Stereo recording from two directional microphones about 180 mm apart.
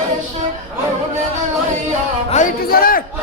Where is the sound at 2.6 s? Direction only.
55° left (ahead or behind).